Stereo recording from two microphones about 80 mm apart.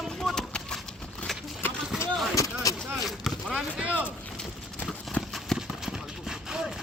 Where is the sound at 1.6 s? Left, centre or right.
Left.